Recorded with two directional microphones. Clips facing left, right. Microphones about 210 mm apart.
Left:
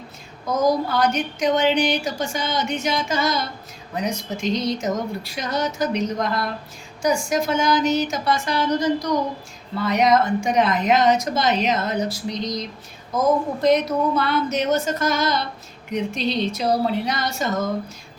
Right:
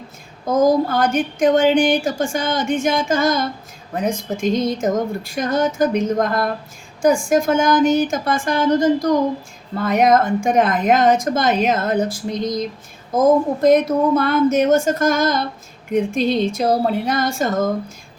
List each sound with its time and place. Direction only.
0.5 s a woman's voice: 50° right (ahead or behind)